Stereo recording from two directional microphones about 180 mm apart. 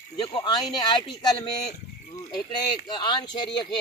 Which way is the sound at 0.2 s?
25° left (ahead or behind).